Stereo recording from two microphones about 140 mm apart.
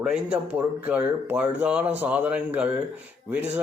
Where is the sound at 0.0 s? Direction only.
5° right (ahead or behind).